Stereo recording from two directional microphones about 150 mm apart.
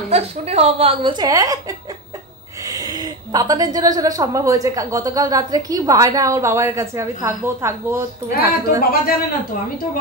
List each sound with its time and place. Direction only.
0.1 s a woman's voice: 45° right (ahead or behind); by 8.0 s 15° right (ahead or behind)
8.4 s a woman's voice: 80° left